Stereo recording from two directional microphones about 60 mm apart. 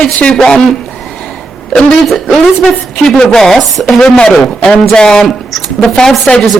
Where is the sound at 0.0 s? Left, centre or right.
Left.